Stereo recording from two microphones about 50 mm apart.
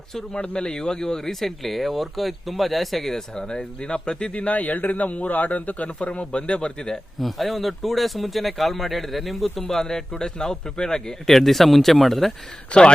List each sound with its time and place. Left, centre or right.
0.3 s speech: left
4.4 s a man's voice: left
7.2 s speech: centre
12.7 s a man's voice: left